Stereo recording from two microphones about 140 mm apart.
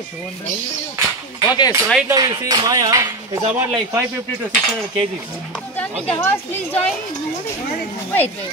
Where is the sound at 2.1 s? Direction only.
30° right (ahead or behind).